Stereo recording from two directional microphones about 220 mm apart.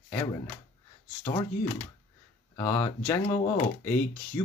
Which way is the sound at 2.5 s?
15° left (ahead or behind).